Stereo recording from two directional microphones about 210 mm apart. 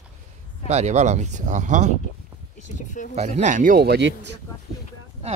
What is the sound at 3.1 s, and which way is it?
Speech, 35° right (ahead or behind).